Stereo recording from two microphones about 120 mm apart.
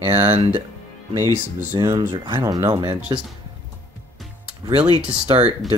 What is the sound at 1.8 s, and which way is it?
Speech, 30° right (ahead or behind).